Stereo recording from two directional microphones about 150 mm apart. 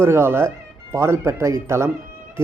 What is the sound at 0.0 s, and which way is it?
Speech, 15° right (ahead or behind).